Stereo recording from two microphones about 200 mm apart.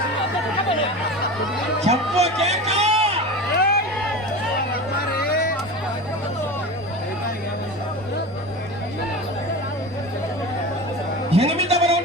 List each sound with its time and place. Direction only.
1.8 s music: 30° right (ahead or behind)
3.5 s crowd: 50° left (ahead or behind)
5.1 s vehicle: 50° left (ahead or behind)
11.3 s a sound: 30° right (ahead or behind)